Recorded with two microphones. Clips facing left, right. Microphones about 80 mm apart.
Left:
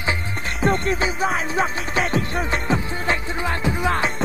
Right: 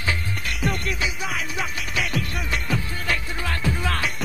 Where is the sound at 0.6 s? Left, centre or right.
Left.